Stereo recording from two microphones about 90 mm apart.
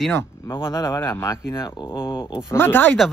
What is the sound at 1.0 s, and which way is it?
Speech, 25° left (ahead or behind).